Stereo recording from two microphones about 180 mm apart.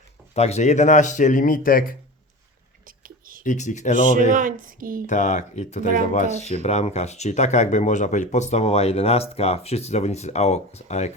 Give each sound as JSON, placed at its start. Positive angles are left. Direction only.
{"t": 0.3, "sound": "speech", "side_deg": 35}
{"t": 2.8, "sound": "a sound", "side_deg": -50}
{"t": 3.4, "sound": "speech", "side_deg": 45}
{"t": 4.3, "sound": "speech", "side_deg": -45}
{"t": 5.0, "sound": "speech", "side_deg": 40}